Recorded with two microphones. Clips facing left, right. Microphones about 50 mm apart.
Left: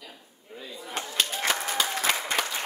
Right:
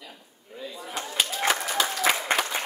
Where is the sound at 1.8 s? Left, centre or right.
Centre.